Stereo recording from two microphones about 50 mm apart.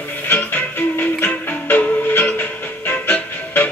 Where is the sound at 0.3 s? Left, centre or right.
Left.